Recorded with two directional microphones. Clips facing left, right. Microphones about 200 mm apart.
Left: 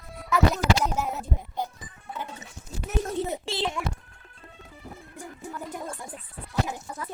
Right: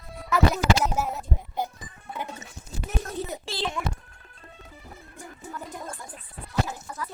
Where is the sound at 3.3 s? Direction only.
25° left (ahead or behind).